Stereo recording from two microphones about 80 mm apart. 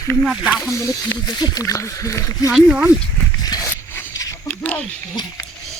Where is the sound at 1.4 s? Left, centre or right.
Left.